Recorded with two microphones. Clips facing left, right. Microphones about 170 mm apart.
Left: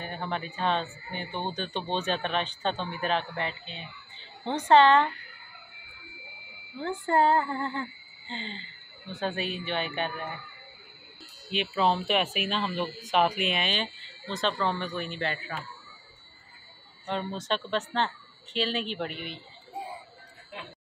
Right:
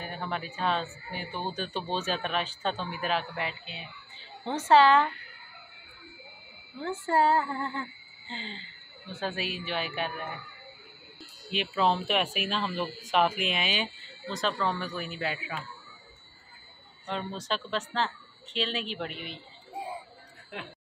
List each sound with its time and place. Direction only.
0.3 s speech: centre (ahead or behind)
6.7 s speech: centre (ahead or behind)
11.1 s speech: centre (ahead or behind)
17.1 s speech: 5° left (ahead or behind)